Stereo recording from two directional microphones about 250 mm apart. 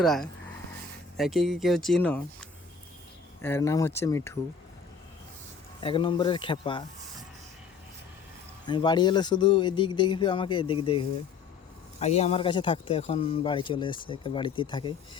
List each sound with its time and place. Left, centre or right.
0.0 s speech: centre
5.8 s speech: centre
8.6 s speech: centre